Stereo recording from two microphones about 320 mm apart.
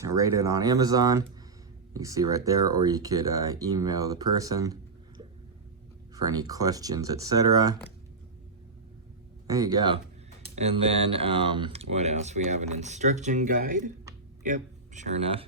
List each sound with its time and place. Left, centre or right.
0.0 s speech: centre
9.5 s speech: centre